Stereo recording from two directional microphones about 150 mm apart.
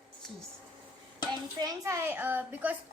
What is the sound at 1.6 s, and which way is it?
A child's voice, 25° right (ahead or behind).